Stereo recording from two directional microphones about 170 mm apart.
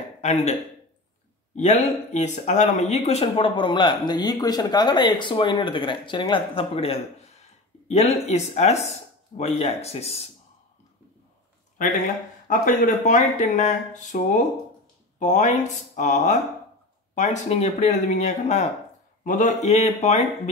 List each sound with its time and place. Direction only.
0.2 s a man's voice: 40° left (ahead or behind)
12.4 s a man's voice: 50° left (ahead or behind)